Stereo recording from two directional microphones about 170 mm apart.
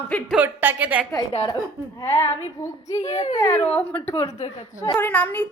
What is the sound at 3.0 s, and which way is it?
Speech, 40° left (ahead or behind).